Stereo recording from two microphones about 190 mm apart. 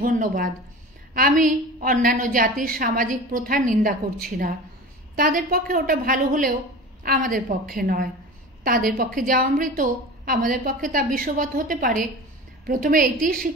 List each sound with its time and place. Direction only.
0.0 s a woman's voice: 45° right (ahead or behind)